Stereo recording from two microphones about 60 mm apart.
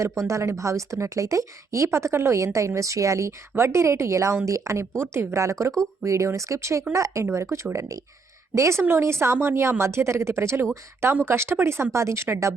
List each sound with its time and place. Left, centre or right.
0.0 s speech: right
3.5 s speech: right
8.8 s speech: right